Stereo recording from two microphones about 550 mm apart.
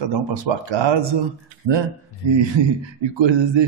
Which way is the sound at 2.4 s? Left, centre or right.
Right.